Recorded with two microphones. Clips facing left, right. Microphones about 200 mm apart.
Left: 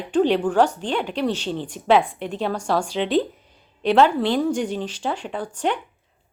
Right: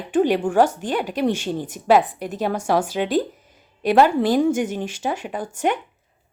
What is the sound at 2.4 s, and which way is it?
Speech, 15° right (ahead or behind).